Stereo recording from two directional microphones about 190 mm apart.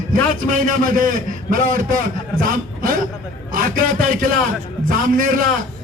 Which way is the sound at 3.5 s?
45° right (ahead or behind).